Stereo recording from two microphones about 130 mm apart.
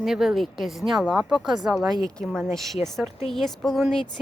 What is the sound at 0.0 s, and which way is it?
Speech, centre (ahead or behind).